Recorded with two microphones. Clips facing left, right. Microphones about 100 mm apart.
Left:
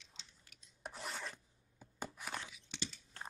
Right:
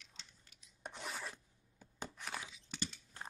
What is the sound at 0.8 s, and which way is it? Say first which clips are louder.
Filing: even; centre (ahead or behind).